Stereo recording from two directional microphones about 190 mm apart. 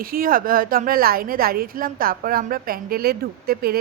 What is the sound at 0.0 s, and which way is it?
Speech, 50° right (ahead or behind).